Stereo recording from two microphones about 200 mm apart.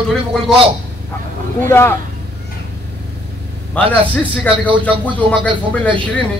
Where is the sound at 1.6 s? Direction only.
10° left (ahead or behind).